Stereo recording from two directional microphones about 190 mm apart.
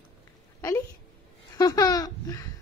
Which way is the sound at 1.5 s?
20° left (ahead or behind).